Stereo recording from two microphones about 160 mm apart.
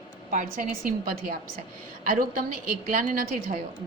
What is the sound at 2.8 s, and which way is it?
Speech, 60° right (ahead or behind).